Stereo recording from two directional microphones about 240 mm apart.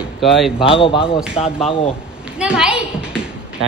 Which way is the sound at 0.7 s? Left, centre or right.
Left.